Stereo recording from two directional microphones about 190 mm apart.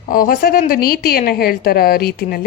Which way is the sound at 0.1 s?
50° left (ahead or behind).